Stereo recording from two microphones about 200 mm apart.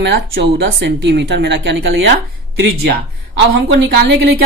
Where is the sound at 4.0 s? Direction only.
50° right (ahead or behind).